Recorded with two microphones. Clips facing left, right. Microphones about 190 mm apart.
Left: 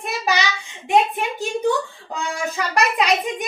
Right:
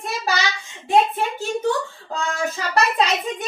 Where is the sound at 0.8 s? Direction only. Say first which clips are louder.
Even; 15° left (ahead or behind).